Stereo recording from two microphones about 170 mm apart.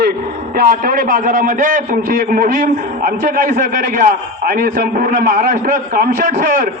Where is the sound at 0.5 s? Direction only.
60° right (ahead or behind).